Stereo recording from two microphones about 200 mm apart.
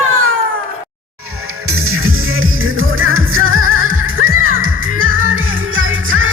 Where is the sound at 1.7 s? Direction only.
90° right.